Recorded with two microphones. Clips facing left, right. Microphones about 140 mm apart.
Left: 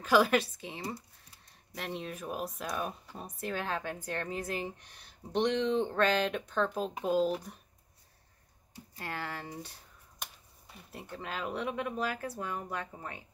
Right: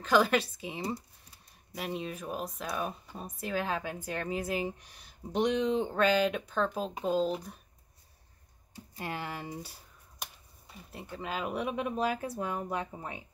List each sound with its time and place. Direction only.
0.0 s speech: 5° left (ahead or behind)
1.8 s speech: 5° right (ahead or behind)
8.9 s speech: 20° right (ahead or behind)
10.9 s speech: centre (ahead or behind); by 13.2 s 20° right (ahead or behind)